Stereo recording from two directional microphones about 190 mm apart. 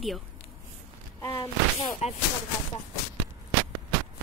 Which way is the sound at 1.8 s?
35° left (ahead or behind).